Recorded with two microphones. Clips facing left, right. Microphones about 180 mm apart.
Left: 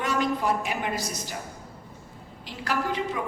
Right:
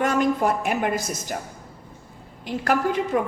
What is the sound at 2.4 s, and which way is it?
Speech, 50° right (ahead or behind).